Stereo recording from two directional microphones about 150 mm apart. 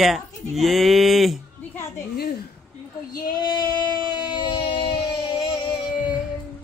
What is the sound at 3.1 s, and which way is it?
Female singing, 30° left (ahead or behind).